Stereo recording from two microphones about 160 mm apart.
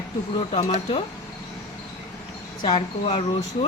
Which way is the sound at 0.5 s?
35° left (ahead or behind).